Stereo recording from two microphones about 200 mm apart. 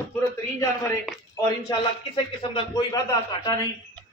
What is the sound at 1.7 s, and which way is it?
A man's voice, 20° left (ahead or behind).